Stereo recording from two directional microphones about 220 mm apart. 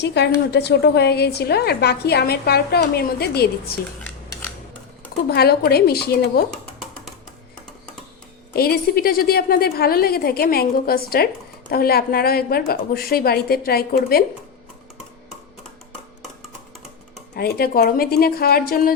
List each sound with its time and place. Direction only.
0.0 s a woman's voice: 50° left (ahead or behind)
5.3 s a woman's voice: 45° left (ahead or behind)
6.5 s a sound: centre (ahead or behind)
8.5 s a woman's voice: 45° left (ahead or behind)
17.3 s a woman's voice: 45° left (ahead or behind)